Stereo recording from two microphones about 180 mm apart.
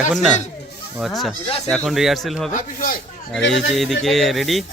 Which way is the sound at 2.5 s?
50° left (ahead or behind).